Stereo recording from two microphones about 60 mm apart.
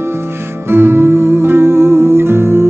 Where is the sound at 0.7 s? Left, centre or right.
Right.